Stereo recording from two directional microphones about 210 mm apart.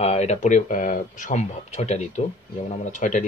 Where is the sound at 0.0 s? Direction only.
30° left (ahead or behind).